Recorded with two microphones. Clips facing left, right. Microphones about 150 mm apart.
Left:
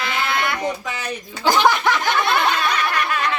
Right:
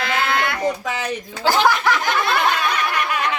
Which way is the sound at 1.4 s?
20° left (ahead or behind).